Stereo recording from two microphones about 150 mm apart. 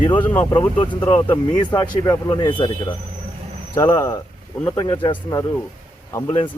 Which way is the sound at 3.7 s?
20° left (ahead or behind).